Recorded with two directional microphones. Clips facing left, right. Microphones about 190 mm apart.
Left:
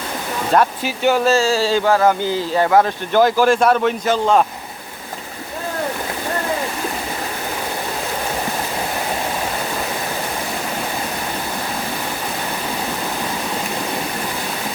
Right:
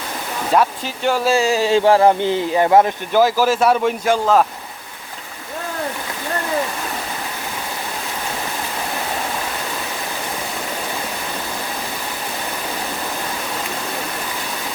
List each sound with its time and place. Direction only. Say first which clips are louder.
0.9 s speech: left 3 dB; 5° left (ahead or behind)
1.2 s speech: left 1 dB; 15° right (ahead or behind)
1.8 s speech: right 2 dB; 30° right (ahead or behind)
3.1 s speech: left 1 dB; 5° right (ahead or behind)